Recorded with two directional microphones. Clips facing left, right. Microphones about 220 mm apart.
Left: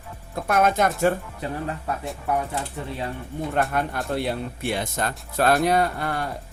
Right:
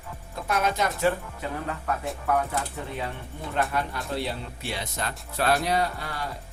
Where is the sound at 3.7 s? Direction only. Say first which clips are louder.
Left 4 dB; 55° left (ahead or behind).